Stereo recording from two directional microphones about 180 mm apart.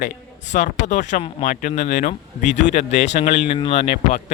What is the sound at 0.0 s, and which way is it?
Speech, 40° left (ahead or behind).